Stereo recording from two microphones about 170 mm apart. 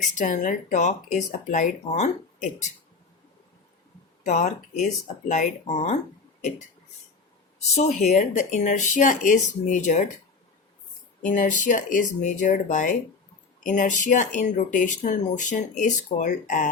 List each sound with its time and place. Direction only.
0.2 s speech: 50° left (ahead or behind)
4.2 s speech: 45° left (ahead or behind)
7.7 s speech: 45° left (ahead or behind)
11.3 s speech: 50° left (ahead or behind)